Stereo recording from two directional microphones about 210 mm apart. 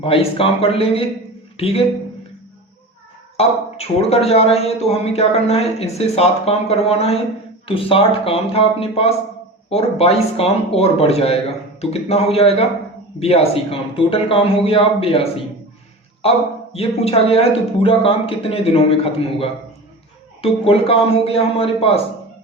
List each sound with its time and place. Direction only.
0.0 s speech: 25° left (ahead or behind)
3.3 s speech: 30° left (ahead or behind)